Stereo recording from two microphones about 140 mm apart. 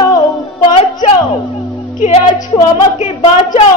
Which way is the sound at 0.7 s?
45° left (ahead or behind).